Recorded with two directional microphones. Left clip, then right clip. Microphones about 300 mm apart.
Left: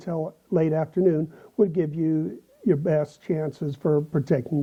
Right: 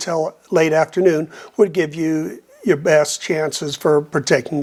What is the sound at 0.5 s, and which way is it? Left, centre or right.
Speech, centre.